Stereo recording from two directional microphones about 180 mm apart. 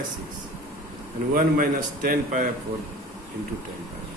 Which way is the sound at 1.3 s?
50° right (ahead or behind).